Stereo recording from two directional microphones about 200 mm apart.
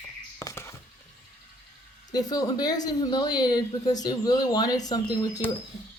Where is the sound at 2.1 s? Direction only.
20° left (ahead or behind).